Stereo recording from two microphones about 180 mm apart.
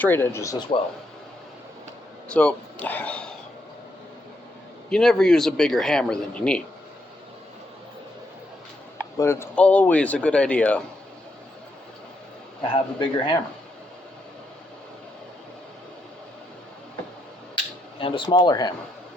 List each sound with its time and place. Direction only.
0.0 s speech: 10° left (ahead or behind)
2.3 s speech: 5° left (ahead or behind)
4.9 s speech: 5° left (ahead or behind)
9.1 s speech: 15° left (ahead or behind)
12.7 s speech: 25° left (ahead or behind)
18.0 s speech: 30° left (ahead or behind)